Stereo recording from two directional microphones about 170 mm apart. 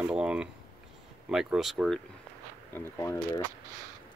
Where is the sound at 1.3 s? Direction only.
5° right (ahead or behind).